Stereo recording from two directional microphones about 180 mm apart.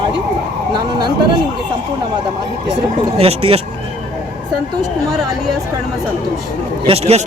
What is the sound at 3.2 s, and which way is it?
Speech, 30° right (ahead or behind).